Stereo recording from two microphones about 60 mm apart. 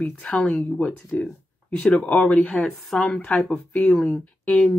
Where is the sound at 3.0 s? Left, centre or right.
Centre.